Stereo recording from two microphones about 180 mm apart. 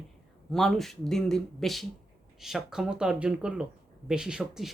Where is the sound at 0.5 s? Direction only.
Centre (ahead or behind).